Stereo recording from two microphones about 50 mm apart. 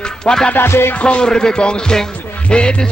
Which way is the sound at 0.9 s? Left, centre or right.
Left.